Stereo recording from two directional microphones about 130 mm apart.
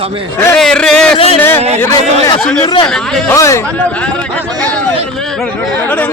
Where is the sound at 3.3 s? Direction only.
25° left (ahead or behind).